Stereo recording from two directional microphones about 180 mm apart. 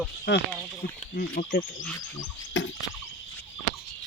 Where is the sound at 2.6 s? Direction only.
90° left.